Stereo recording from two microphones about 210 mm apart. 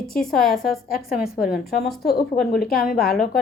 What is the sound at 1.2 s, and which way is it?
A woman's voice, 45° left (ahead or behind).